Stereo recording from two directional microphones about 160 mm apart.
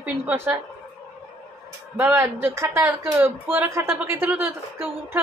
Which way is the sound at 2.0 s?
15° right (ahead or behind).